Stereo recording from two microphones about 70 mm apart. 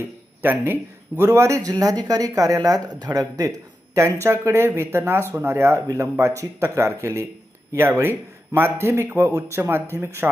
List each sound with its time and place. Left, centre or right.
0.4 s a man's voice: right
1.7 s speech: right
3.9 s speech: right